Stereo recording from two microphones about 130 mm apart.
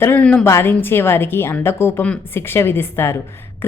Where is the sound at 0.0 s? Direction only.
15° left (ahead or behind).